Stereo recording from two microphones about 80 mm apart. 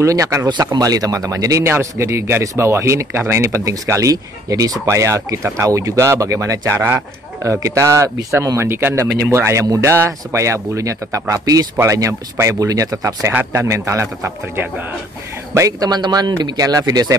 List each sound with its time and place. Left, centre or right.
0.0 s speech: right
0.5 s speech: right
13.3 s speech: right
15.8 s speech: right